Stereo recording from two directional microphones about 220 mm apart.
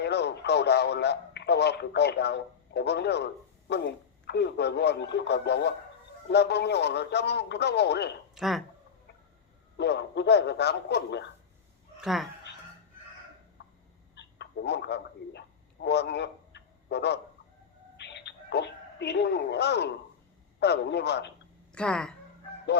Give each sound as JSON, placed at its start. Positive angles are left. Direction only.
{"t": 0.0, "sound": "speech", "side_deg": 50}
{"t": 8.4, "sound": "speech", "side_deg": 0}
{"t": 9.7, "sound": "speech", "side_deg": 50}
{"t": 11.9, "sound": "speech", "side_deg": 0}
{"t": 13.6, "sound": "a sound", "side_deg": 50}
{"t": 17.9, "sound": "telephone", "side_deg": 50}
{"t": 20.6, "sound": "speech", "side_deg": 50}
{"t": 21.7, "sound": "speech", "side_deg": 5}